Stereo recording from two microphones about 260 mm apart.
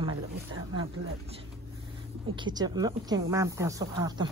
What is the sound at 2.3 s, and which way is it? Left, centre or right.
A woman's voice, centre.